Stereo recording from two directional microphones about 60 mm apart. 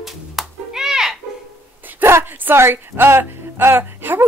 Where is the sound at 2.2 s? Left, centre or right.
Right.